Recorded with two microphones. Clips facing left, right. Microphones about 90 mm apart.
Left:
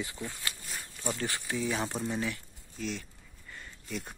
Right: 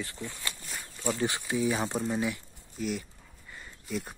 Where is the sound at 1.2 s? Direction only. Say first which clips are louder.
Right 5 dB; 15° right (ahead or behind); by 4.1 s centre (ahead or behind).